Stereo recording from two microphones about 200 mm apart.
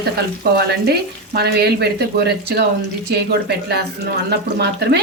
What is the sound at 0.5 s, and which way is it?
Speech, 55° right (ahead or behind).